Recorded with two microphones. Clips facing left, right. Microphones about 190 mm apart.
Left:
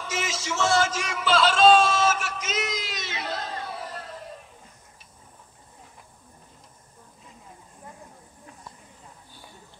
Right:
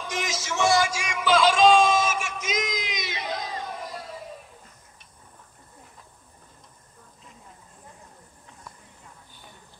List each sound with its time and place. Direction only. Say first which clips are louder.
0.0 s music: even; 15° right (ahead or behind)
0.6 s a sound: right 1 dB; 15° right (ahead or behind)
2.9 s music: right 1 dB; 15° right (ahead or behind)